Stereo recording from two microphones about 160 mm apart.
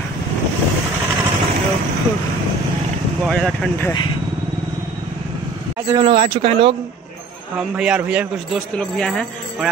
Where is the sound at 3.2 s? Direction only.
5° left (ahead or behind).